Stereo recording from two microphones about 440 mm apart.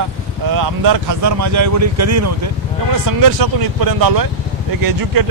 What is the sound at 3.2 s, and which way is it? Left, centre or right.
Speech, right.